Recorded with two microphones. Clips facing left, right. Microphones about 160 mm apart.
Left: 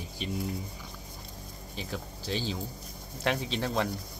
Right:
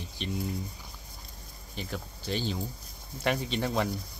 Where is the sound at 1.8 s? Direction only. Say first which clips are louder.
Even; centre (ahead or behind).